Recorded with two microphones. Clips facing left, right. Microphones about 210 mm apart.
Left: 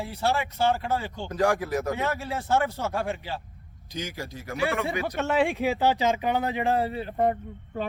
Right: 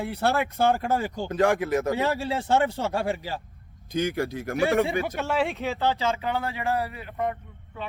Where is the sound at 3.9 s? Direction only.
55° right (ahead or behind).